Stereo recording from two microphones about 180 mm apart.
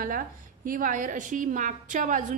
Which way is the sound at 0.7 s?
50° right (ahead or behind).